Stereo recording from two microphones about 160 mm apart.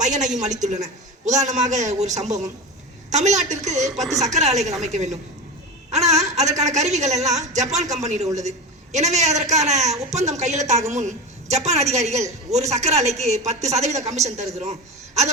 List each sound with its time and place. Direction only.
0.0 s a woman's voice: 50° right (ahead or behind)